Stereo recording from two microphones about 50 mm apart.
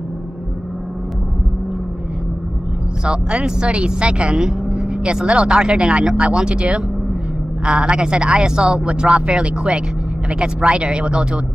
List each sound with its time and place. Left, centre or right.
3.1 s speech: centre